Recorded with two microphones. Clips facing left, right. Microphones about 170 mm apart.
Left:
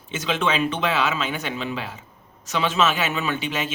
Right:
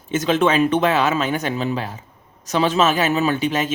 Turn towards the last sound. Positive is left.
turn(degrees=-40)  # may be behind; listen again after turning